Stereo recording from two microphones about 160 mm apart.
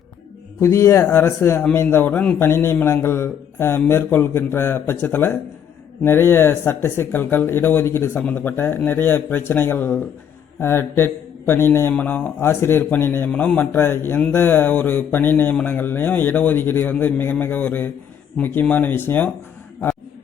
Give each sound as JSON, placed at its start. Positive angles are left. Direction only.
{"t": 0.6, "sound": "a man's voice", "side_deg": 15}